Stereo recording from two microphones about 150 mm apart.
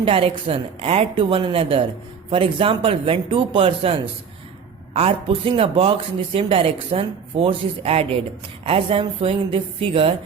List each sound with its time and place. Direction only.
0.0 s speech: 40° right (ahead or behind)
4.9 s speech: 40° right (ahead or behind)